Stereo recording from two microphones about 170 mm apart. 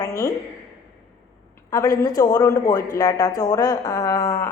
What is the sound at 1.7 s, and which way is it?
A woman's voice, 20° left (ahead or behind).